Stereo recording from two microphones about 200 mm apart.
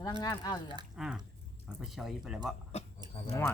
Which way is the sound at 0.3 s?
20° left (ahead or behind).